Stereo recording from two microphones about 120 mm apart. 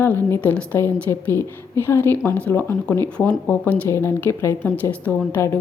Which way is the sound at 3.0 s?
10° left (ahead or behind).